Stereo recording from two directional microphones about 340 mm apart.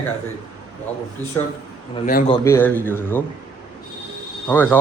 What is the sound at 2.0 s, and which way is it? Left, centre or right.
Speech, left.